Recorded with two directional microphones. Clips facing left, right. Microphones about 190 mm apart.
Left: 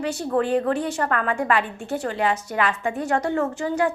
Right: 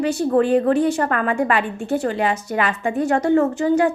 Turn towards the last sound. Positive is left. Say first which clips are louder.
# right 6 dB
turn(degrees=-15)  # may be behind; listen again after turning